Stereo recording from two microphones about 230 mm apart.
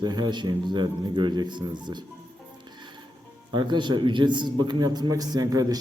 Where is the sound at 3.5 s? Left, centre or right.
Centre.